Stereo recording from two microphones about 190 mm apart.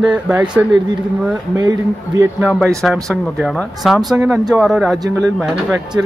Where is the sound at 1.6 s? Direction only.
20° right (ahead or behind).